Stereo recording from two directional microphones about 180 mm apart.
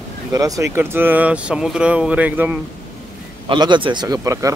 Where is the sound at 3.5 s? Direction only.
25° right (ahead or behind).